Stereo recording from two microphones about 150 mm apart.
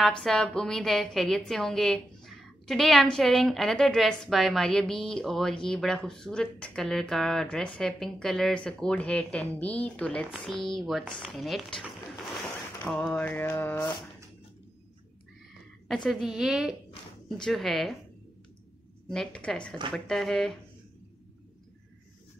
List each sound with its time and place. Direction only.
0.2 s a woman's voice: 5° left (ahead or behind)
15.9 s a woman's voice: centre (ahead or behind)
19.0 s a woman's voice: 5° left (ahead or behind)